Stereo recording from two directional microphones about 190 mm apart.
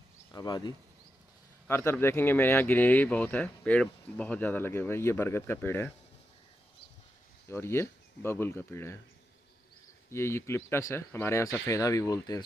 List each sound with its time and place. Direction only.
0.3 s speech: 20° left (ahead or behind)
7.4 s speech: 15° left (ahead or behind)
10.1 s speech: 15° left (ahead or behind)